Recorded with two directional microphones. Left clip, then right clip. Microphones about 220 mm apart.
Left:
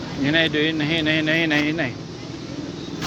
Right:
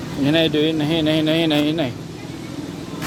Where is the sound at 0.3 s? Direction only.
15° right (ahead or behind).